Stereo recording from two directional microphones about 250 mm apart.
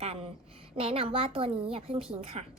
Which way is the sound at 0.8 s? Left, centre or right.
Right.